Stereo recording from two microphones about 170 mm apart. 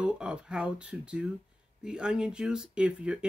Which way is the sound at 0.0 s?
5° right (ahead or behind).